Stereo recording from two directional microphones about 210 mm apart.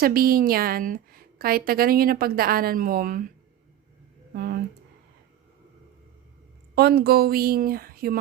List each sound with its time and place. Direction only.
0.0 s a woman's voice: 45° right (ahead or behind)
4.4 s a woman's voice: 45° right (ahead or behind)
6.7 s a woman's voice: 50° right (ahead or behind)